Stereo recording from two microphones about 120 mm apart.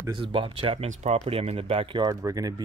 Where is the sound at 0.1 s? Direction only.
45° right (ahead or behind).